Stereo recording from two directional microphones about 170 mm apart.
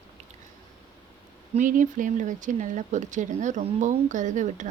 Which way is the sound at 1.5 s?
50° right (ahead or behind).